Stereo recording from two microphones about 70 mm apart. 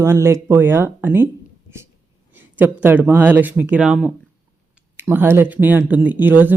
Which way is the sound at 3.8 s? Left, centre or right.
Centre.